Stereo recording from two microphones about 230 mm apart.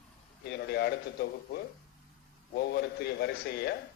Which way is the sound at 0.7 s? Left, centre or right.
Left.